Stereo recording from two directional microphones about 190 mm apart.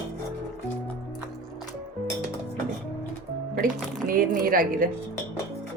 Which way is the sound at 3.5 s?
50° right (ahead or behind).